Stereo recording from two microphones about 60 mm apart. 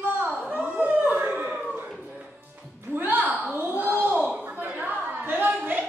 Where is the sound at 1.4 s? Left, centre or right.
Centre.